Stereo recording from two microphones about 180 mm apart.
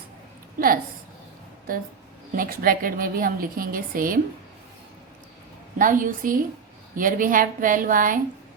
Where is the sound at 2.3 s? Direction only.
55° right (ahead or behind).